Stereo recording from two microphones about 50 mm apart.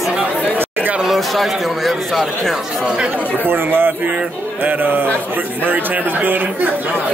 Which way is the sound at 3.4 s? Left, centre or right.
Right.